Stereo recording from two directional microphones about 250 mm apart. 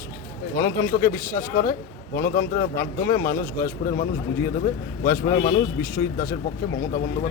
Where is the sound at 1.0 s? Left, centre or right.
Left.